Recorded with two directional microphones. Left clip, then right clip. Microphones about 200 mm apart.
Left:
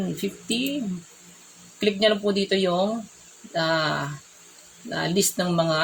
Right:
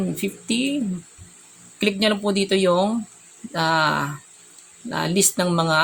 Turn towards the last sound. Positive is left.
turn(degrees=-30)  # may be behind; listen again after turning